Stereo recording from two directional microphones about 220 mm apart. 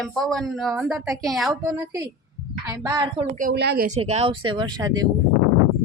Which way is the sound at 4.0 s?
25° right (ahead or behind).